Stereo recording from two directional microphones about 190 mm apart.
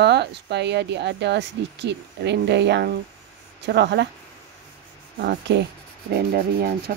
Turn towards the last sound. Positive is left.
turn(degrees=-50)  # may be behind; listen again after turning